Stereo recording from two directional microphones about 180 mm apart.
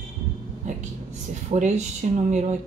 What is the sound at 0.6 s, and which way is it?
Speech, 40° right (ahead or behind).